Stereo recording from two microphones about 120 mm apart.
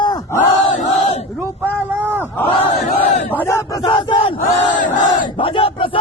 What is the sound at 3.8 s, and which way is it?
Battle cry, 45° left (ahead or behind).